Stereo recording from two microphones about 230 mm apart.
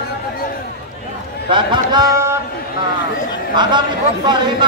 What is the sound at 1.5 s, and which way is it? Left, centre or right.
Speech, right.